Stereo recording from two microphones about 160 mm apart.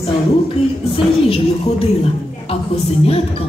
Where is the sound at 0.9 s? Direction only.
35° left (ahead or behind).